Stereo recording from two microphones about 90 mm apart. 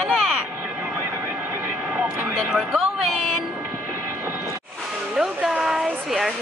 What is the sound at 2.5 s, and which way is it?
Music, centre (ahead or behind).